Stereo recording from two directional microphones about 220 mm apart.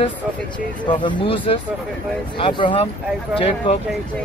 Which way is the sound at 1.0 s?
20° left (ahead or behind).